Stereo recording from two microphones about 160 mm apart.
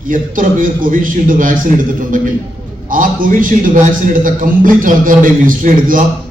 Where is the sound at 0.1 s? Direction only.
55° right (ahead or behind).